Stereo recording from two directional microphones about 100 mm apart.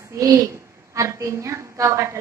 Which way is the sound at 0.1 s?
30° right (ahead or behind).